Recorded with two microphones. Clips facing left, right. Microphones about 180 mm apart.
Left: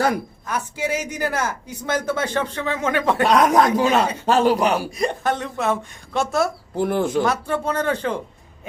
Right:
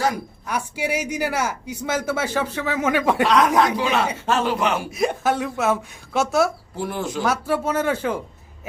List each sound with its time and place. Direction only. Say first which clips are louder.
0.4 s a man's voice: right 1 dB; 10° right (ahead or behind)
3.2 s a man's voice: left 4 dB; 45° left (ahead or behind)
4.9 s a woman's voice: right 1 dB; 5° right (ahead or behind)
6.7 s speech: left 9 dB; 55° left (ahead or behind)
7.2 s a man's voice: left 1 dB; 5° right (ahead or behind)